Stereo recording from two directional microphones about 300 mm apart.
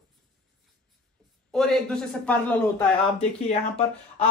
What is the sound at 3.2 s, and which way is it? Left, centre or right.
Speech, left.